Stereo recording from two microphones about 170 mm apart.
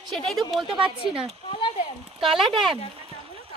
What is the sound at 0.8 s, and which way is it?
Speech, 30° right (ahead or behind).